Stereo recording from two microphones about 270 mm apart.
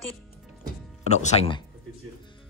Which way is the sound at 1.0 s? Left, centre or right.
Left.